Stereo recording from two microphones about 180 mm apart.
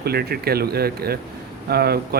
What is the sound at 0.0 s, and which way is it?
Speech, 60° right (ahead or behind).